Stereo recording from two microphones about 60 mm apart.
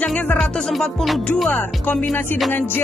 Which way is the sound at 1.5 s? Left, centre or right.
Left.